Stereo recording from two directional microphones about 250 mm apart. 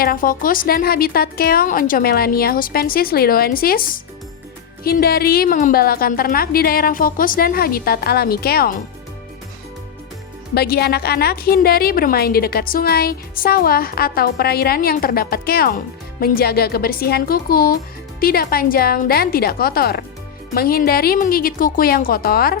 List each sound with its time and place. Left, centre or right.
0.0 s a woman's voice: left
10.5 s a woman's voice: left